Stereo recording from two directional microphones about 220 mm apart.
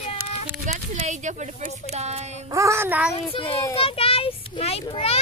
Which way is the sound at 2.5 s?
15° right (ahead or behind).